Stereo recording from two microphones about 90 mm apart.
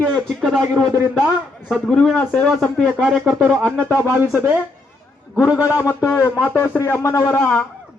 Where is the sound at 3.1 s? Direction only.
10° right (ahead or behind).